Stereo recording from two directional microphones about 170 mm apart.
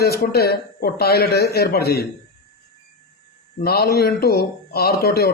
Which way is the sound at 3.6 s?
65° left (ahead or behind).